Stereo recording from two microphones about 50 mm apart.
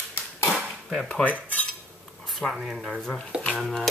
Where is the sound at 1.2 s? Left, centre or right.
Left.